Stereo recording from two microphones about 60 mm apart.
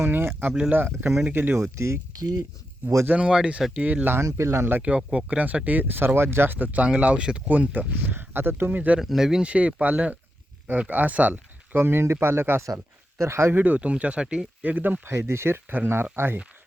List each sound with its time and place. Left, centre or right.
0.0 s speech: right
1.7 s speech: right
2.1 s speech: right
3.2 s speech: centre
4.0 s speech: right
4.8 s speech: right
6.8 s speech: centre
7.4 s speech: right
9.0 s speech: centre; by 12.6 s right
12.6 s speech: right
13.5 s speech: right
15.0 s speech: right